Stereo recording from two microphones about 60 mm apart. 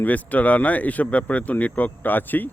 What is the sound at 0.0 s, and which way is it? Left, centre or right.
Speech, left.